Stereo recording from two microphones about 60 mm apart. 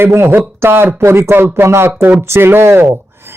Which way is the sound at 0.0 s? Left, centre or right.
Right.